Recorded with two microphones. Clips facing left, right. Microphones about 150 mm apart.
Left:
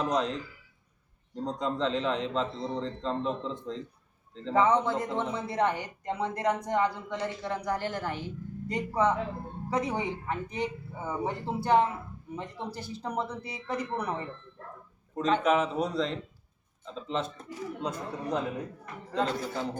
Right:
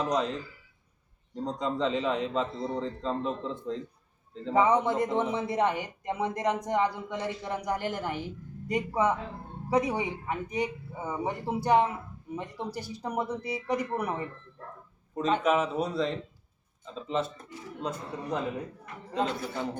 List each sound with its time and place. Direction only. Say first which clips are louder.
0.0 s a man's voice: even; centre (ahead or behind)
4.4 s a woman's voice: right 1 dB; 15° right (ahead or behind)
15.1 s a man's voice: even; centre (ahead or behind)